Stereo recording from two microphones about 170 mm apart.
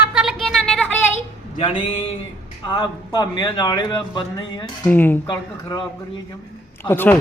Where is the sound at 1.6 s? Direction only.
30° left (ahead or behind).